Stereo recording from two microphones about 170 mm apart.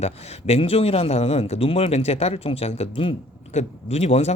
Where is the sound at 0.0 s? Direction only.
40° left (ahead or behind).